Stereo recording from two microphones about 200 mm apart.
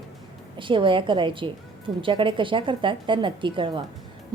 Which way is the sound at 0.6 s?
25° right (ahead or behind).